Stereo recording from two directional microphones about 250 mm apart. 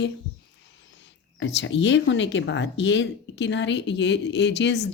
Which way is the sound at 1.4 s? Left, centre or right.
Left.